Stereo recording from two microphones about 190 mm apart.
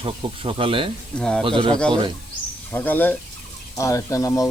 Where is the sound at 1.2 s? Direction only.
5° left (ahead or behind).